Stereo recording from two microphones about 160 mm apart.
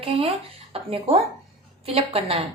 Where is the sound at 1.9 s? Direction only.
35° right (ahead or behind).